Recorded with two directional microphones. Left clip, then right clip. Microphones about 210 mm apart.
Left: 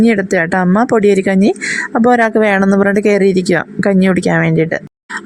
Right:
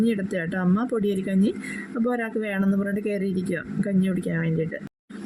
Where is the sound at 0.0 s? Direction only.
40° left (ahead or behind).